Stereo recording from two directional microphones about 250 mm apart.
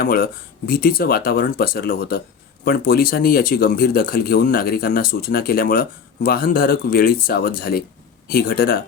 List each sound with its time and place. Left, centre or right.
0.0 s speech: left